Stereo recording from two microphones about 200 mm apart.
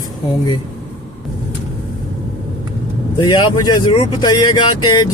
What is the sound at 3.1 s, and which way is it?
Speech, 20° left (ahead or behind).